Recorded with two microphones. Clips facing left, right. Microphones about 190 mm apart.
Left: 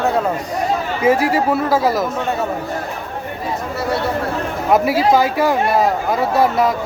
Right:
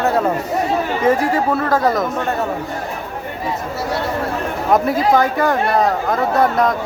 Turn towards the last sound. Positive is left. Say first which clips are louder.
# even
turn(degrees=5)  # may be behind; listen again after turning